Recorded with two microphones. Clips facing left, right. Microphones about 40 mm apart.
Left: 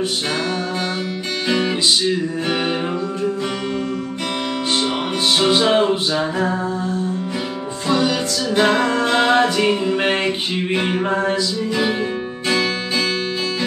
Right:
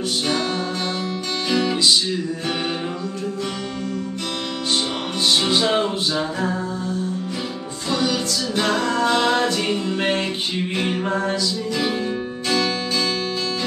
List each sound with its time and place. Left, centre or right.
1.5 s music: left
5.4 s a capella: left
7.9 s music: left
8.6 s music: left
9.3 s a capella: left